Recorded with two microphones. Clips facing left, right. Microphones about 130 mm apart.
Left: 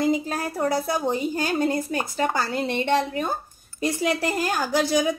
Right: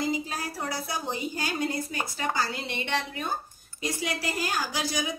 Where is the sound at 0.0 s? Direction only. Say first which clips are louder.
Left 7 dB; 50° left (ahead or behind).